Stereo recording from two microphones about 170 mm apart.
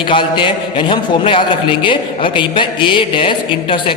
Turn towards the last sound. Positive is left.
turn(degrees=30)  # may be behind; listen again after turning